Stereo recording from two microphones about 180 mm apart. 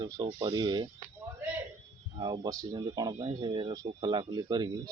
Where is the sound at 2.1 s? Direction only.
25° right (ahead or behind).